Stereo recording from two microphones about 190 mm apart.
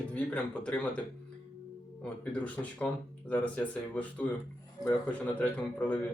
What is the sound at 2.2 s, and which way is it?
Speech, 10° left (ahead or behind).